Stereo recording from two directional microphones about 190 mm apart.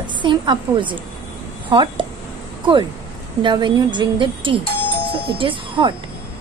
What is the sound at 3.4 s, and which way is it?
A woman's voice, 25° right (ahead or behind).